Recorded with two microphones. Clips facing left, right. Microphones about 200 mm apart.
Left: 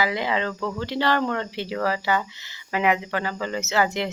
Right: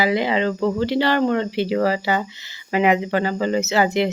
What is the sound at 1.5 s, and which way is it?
Speech, 90° right.